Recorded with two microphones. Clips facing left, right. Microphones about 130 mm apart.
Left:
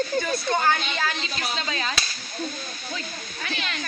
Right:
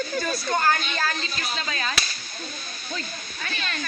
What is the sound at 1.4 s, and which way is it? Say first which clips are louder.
Speech: left 1 dB; 20° left (ahead or behind).